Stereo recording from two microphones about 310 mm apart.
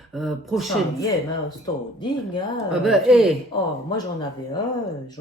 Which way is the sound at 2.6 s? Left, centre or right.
Centre.